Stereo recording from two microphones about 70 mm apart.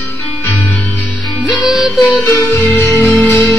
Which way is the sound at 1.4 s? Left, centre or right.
Centre.